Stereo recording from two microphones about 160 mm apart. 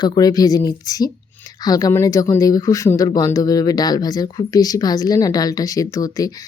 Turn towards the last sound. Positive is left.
turn(degrees=20)  # may be behind; listen again after turning